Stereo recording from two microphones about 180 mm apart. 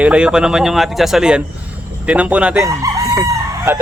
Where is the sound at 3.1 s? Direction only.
10° right (ahead or behind).